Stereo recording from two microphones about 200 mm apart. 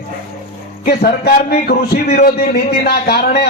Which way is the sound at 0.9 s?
50° left (ahead or behind).